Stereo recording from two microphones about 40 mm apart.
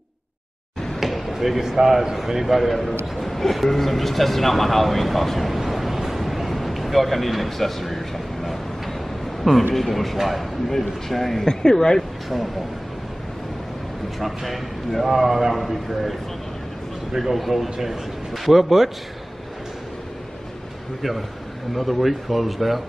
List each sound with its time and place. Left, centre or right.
0.9 s speech: centre
11.4 s speech: centre
14.2 s speech: centre
21.7 s speech: centre